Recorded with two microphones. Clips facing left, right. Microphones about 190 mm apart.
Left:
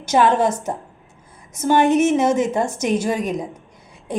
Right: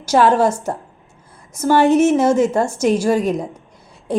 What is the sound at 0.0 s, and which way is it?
A woman's voice, 20° left (ahead or behind).